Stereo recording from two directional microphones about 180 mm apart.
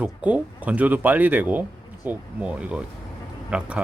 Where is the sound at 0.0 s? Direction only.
10° right (ahead or behind).